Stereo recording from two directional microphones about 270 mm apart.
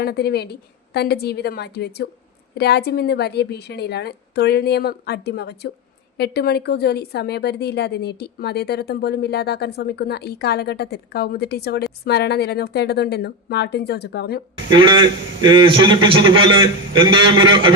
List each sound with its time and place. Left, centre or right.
0.0 s a woman's voice: left
14.7 s a man's voice: centre